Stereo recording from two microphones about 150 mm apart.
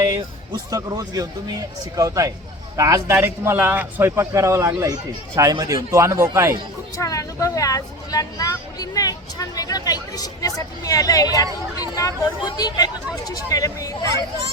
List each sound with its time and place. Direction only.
0.0 s a sound: 25° right (ahead or behind)
0.7 s a man's voice: 25° right (ahead or behind)
6.9 s speech: 20° left (ahead or behind)